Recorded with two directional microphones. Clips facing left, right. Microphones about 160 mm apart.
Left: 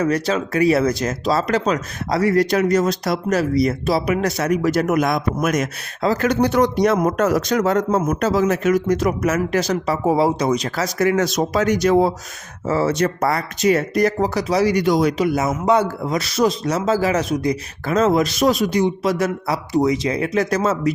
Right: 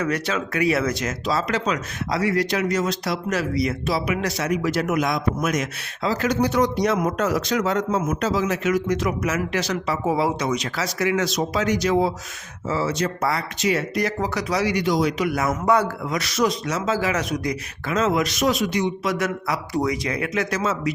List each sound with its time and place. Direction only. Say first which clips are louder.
0.0 s speech: left 5 dB; 35° left (ahead or behind)
15.2 s speech: left 4 dB; 25° left (ahead or behind); by 20.9 s 40° left (ahead or behind)